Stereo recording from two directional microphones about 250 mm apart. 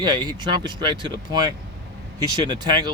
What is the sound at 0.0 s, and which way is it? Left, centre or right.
Speech, centre.